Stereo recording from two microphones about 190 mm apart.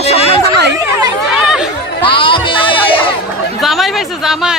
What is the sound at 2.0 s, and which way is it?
Music, 25° left (ahead or behind).